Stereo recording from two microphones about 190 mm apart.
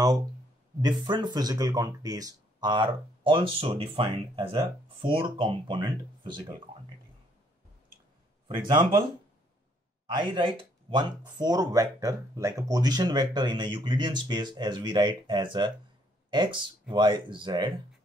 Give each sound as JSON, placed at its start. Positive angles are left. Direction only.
{"t": 0.7, "sound": "speech", "side_deg": -25}
{"t": 8.5, "sound": "speech", "side_deg": -25}
{"t": 10.0, "sound": "speech", "side_deg": -25}